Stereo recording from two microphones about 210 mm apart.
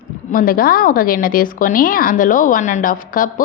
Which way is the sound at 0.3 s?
40° left (ahead or behind).